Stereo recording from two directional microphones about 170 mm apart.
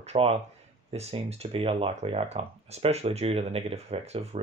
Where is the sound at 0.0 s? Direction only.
35° right (ahead or behind).